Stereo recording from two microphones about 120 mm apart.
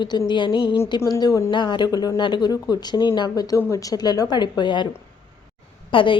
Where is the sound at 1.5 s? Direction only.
40° left (ahead or behind).